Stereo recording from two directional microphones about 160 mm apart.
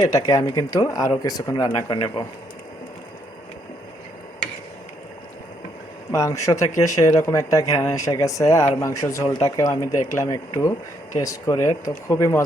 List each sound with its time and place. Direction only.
0.0 s speech: 25° left (ahead or behind)
6.1 s speech: 20° left (ahead or behind)